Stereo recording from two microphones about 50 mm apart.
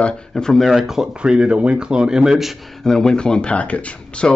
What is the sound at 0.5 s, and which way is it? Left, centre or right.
Speech, centre.